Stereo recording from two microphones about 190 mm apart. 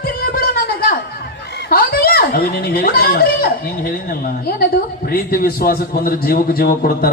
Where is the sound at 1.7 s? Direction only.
50° left (ahead or behind).